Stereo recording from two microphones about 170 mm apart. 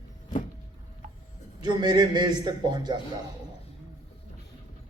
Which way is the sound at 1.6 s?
25° right (ahead or behind).